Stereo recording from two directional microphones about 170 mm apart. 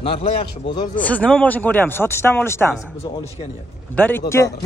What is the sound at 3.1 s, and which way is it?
Speech, 25° left (ahead or behind).